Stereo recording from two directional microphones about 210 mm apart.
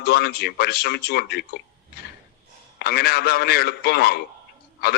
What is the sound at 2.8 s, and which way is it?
A man's voice, 50° left (ahead or behind).